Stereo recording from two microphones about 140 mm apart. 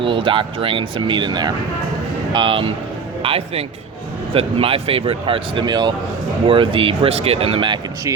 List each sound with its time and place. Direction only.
0.0 s speech: 40° right (ahead or behind)